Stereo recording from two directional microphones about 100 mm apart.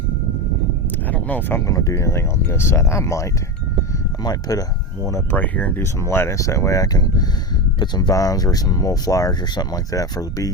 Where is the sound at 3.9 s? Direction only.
40° left (ahead or behind).